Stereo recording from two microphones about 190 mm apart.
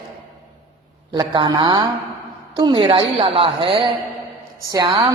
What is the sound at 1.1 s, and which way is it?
A woman's voice, 25° right (ahead or behind).